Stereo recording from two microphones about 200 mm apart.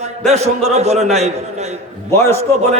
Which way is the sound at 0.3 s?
35° right (ahead or behind).